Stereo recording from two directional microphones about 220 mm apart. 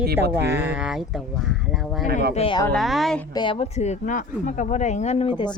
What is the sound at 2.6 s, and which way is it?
Speech, centre (ahead or behind).